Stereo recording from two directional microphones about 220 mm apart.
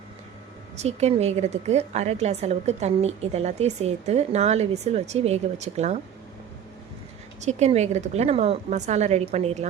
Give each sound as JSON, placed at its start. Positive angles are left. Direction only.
{"t": 0.8, "sound": "a woman's voice", "side_deg": -30}
{"t": 7.4, "sound": "a woman's voice", "side_deg": -30}